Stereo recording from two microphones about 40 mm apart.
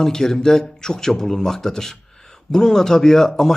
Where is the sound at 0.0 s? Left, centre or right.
Centre.